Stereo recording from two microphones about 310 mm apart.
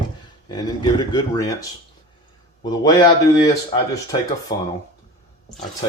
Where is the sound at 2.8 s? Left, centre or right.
Centre.